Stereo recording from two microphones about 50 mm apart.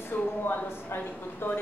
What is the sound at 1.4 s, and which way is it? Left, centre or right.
Speech, left.